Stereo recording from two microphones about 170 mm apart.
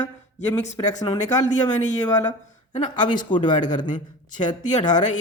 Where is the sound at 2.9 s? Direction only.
25° left (ahead or behind).